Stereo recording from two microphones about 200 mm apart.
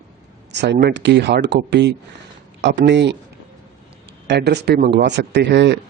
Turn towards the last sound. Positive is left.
turn(degrees=-60)  # may be behind; listen again after turning